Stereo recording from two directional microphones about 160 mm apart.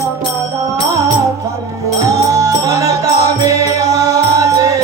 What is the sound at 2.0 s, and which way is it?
Music, 20° right (ahead or behind).